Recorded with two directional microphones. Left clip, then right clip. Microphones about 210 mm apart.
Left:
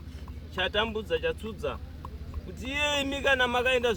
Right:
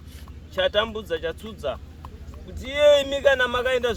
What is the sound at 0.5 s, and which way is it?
A man's voice, 25° right (ahead or behind).